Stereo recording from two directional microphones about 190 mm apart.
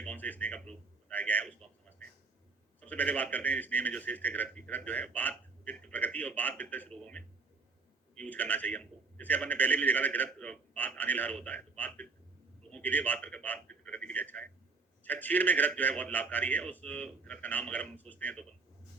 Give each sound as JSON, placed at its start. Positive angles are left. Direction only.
{"t": 0.0, "sound": "speech", "side_deg": 10}
{"t": 2.8, "sound": "a man's voice", "side_deg": 10}